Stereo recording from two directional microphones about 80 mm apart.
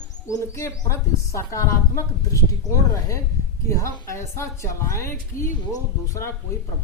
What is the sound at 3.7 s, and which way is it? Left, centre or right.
Speech, left.